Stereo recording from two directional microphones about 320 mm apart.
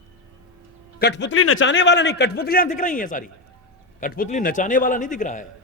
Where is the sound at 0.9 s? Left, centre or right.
Left.